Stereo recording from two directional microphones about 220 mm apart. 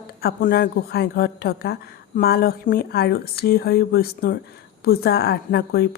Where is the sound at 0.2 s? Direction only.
45° left (ahead or behind).